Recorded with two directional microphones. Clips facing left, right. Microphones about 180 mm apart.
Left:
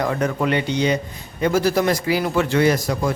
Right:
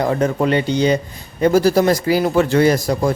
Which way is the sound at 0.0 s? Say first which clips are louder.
Right 4 dB; 30° right (ahead or behind).